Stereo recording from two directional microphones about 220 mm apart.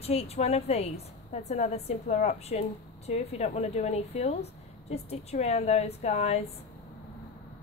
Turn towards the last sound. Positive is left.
turn(degrees=30)  # may be behind; listen again after turning